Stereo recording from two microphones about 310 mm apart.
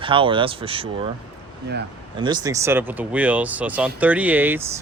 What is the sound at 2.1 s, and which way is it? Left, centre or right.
Speech, centre.